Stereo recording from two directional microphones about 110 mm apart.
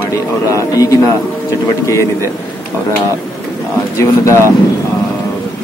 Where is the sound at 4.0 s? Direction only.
25° left (ahead or behind).